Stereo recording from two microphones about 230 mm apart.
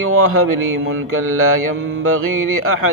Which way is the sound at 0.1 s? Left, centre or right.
Right.